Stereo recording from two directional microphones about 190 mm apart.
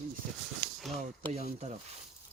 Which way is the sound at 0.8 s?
Centre (ahead or behind).